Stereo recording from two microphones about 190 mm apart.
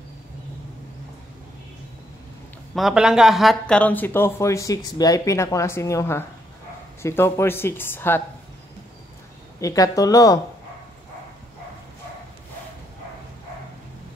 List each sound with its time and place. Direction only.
2.7 s speech: centre (ahead or behind)
9.6 s speech: 15° left (ahead or behind)